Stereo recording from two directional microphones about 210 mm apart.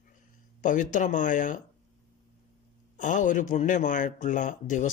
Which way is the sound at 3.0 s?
35° left (ahead or behind).